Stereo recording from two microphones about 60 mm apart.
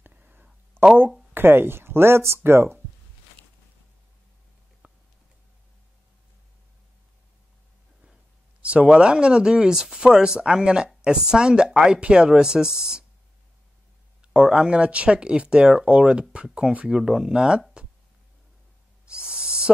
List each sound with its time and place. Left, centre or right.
0.0 s a sound: right
1.3 s speech: right
4.8 s a sound: right
8.6 s speech: centre
14.2 s speech: centre
19.0 s owl: centre